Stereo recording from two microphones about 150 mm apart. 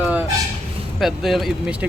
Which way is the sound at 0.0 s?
10° right (ahead or behind).